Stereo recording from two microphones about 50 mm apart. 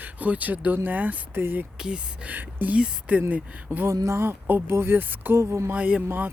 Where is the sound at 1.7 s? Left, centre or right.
Centre.